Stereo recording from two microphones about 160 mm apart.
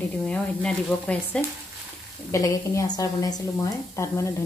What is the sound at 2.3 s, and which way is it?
A woman's voice, 20° left (ahead or behind).